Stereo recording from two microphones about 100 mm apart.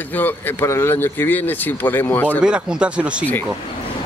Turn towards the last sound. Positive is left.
turn(degrees=-10)  # may be behind; listen again after turning